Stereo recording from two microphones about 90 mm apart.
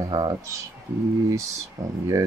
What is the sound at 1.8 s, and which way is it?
Speech, 35° right (ahead or behind).